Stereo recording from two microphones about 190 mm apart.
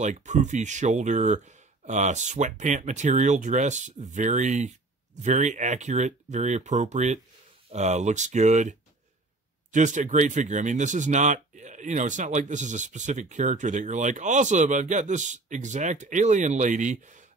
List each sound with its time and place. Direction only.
0.0 s speech: 40° right (ahead or behind)